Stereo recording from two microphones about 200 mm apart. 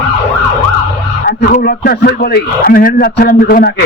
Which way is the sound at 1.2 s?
50° left (ahead or behind).